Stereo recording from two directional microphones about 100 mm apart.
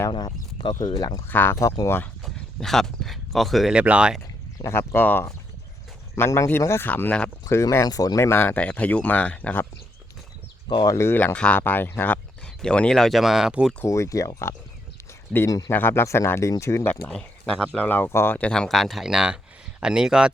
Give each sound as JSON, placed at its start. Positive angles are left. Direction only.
{"t": 0.1, "sound": "speech", "side_deg": 50}
{"t": 1.3, "sound": "speech", "side_deg": 20}
{"t": 2.2, "sound": "speech", "side_deg": 5}
{"t": 3.8, "sound": "speech", "side_deg": -10}
{"t": 4.5, "sound": "speech", "side_deg": 25}
{"t": 7.5, "sound": "speech", "side_deg": 30}
{"t": 10.8, "sound": "speech", "side_deg": 30}
{"t": 11.3, "sound": "speech", "side_deg": 15}
{"t": 12.6, "sound": "speech", "side_deg": 10}
{"t": 13.8, "sound": "speech", "side_deg": 30}
{"t": 15.7, "sound": "speech", "side_deg": 20}
{"t": 17.1, "sound": "speech", "side_deg": 10}
{"t": 18.3, "sound": "speech", "side_deg": 10}